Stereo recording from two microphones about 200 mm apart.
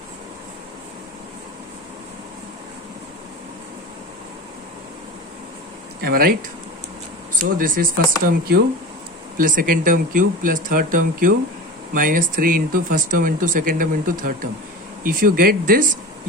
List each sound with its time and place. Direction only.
6.0 s speech: 50° right (ahead or behind)
7.3 s speech: 45° right (ahead or behind)